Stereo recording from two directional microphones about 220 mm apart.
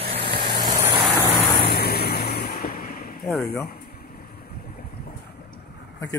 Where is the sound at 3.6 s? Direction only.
45° left (ahead or behind).